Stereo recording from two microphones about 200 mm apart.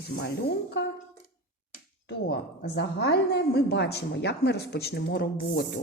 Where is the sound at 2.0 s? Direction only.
55° left (ahead or behind).